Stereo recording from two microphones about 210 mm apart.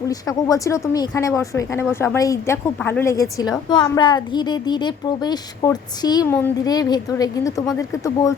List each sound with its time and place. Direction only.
0.1 s a woman's voice: 15° left (ahead or behind)